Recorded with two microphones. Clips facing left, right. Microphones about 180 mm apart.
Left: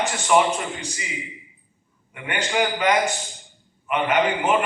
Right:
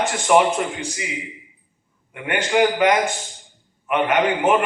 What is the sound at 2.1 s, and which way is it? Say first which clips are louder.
A man's voice: right 5 dB; 55° right (ahead or behind).